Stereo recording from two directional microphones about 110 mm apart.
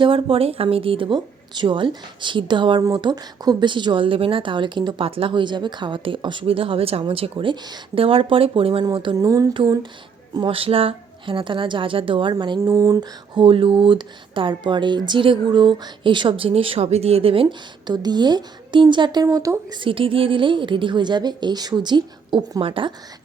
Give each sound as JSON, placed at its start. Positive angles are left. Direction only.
{"t": 0.0, "sound": "a woman's voice", "side_deg": -55}
{"t": 7.9, "sound": "a woman's voice", "side_deg": -55}
{"t": 8.8, "sound": "a woman's voice", "side_deg": -45}
{"t": 9.1, "sound": "speech", "side_deg": -30}
{"t": 10.3, "sound": "a woman's voice", "side_deg": -55}
{"t": 12.6, "sound": "speech", "side_deg": -30}
{"t": 13.3, "sound": "a woman's voice", "side_deg": -50}
{"t": 16.5, "sound": "a woman's voice", "side_deg": -60}
{"t": 17.9, "sound": "speech", "side_deg": -40}
{"t": 19.2, "sound": "speech", "side_deg": -30}
{"t": 19.8, "sound": "a woman's voice", "side_deg": -55}